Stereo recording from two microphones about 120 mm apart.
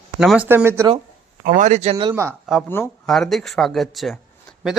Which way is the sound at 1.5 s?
90° right.